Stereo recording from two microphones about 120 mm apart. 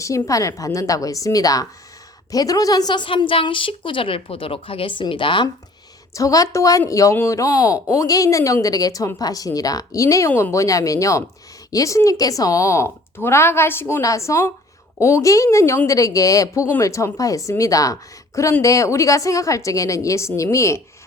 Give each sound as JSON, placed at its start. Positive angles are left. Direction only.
{"t": 0.0, "sound": "a woman's voice", "side_deg": 25}
{"t": 6.1, "sound": "speech", "side_deg": 30}